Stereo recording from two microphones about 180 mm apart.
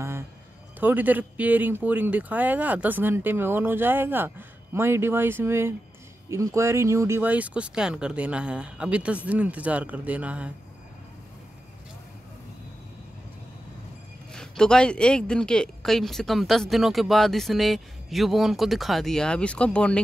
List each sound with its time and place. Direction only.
0.7 s speech: 10° right (ahead or behind)
14.3 s speech: 5° left (ahead or behind)